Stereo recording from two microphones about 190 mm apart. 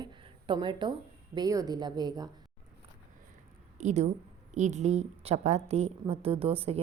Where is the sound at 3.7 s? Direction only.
40° right (ahead or behind).